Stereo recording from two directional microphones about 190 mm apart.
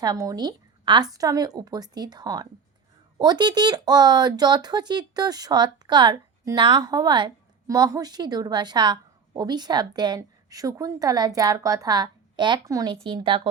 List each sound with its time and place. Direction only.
0.0 s speech: 20° right (ahead or behind)